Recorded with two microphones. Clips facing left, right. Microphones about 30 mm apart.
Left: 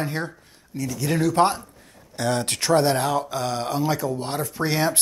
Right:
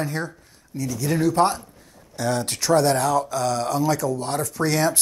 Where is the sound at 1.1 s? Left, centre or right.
Left.